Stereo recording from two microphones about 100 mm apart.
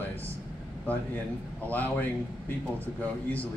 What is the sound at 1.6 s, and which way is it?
Speech, 15° left (ahead or behind).